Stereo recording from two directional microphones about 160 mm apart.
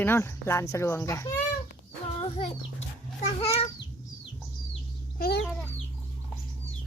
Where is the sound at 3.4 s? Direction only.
40° left (ahead or behind).